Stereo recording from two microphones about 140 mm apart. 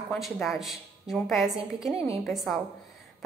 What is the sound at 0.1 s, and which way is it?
A woman's voice, centre (ahead or behind).